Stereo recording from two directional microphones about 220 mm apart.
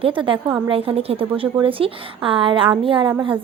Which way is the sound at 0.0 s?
25° right (ahead or behind).